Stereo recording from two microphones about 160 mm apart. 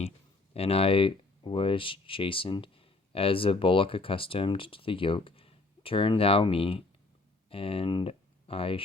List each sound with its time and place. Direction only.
0.5 s speech: 40° left (ahead or behind)